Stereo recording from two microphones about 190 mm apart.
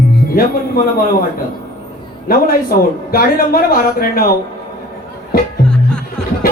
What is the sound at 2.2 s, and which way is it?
A man's voice, 50° left (ahead or behind).